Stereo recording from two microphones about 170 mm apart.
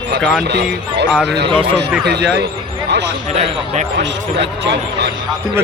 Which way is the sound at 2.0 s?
75° right (ahead or behind).